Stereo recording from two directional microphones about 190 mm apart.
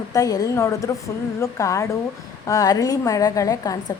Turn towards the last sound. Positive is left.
turn(degrees=20)  # may be behind; listen again after turning